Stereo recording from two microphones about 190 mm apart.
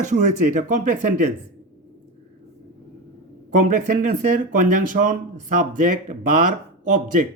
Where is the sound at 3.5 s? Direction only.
40° right (ahead or behind).